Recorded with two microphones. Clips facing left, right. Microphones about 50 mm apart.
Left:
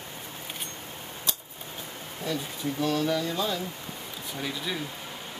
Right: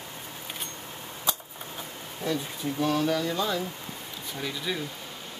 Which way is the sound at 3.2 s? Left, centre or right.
Centre.